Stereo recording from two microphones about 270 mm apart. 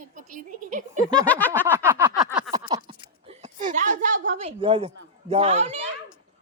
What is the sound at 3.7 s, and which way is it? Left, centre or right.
A woman's voice, right.